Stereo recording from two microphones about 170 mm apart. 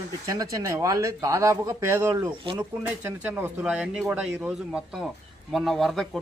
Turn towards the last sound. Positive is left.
turn(degrees=0)  # may be behind; listen again after turning